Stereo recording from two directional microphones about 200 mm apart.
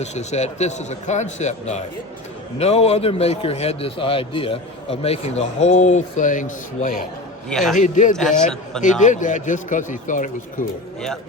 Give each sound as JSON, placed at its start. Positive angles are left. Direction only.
{"t": 0.0, "sound": "a man's voice", "side_deg": 35}
{"t": 7.5, "sound": "a man's voice", "side_deg": 0}
{"t": 7.8, "sound": "a man's voice", "side_deg": 40}